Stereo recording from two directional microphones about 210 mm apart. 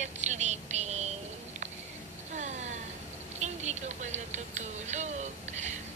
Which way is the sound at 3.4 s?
35° right (ahead or behind).